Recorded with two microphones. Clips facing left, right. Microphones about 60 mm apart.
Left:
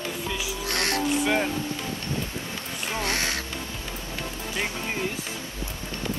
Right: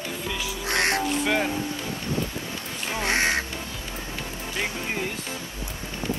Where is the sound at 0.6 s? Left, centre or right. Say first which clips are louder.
Right 4 dB; right.